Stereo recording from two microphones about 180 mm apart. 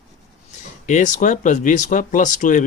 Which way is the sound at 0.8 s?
40° left (ahead or behind).